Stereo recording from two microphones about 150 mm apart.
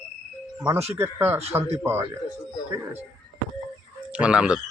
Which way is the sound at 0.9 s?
15° right (ahead or behind).